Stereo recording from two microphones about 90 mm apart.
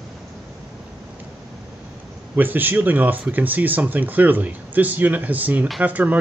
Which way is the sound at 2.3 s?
20° right (ahead or behind).